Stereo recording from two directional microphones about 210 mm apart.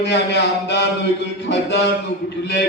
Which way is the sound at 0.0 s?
55° left (ahead or behind).